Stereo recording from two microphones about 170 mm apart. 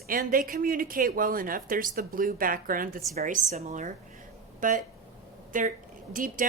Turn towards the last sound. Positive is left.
turn(degrees=-50)  # may be behind; listen again after turning